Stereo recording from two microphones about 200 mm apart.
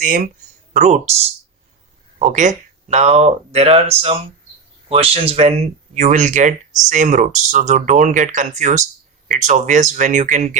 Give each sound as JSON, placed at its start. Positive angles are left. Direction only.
{"t": 0.0, "sound": "speech", "side_deg": -45}
{"t": 0.7, "sound": "speech", "side_deg": -35}